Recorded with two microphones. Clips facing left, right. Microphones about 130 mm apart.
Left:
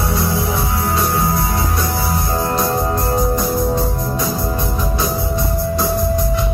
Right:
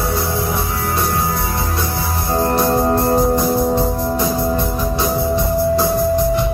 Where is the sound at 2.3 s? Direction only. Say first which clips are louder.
Right 5 dB; 30° right (ahead or behind).